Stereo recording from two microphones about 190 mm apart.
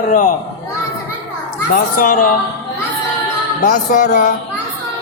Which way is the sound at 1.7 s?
50° left (ahead or behind).